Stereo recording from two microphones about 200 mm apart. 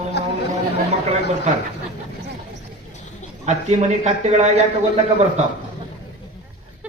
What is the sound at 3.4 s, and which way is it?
A man's voice, 35° right (ahead or behind).